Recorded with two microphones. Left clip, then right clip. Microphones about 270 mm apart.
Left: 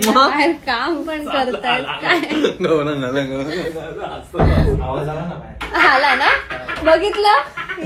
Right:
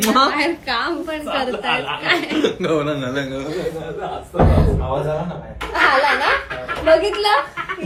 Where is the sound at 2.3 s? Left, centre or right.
Centre.